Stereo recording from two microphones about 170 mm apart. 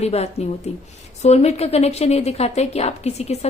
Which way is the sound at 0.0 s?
40° left (ahead or behind).